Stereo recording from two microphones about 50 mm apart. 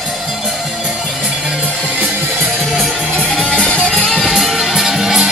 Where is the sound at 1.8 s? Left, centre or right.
Right.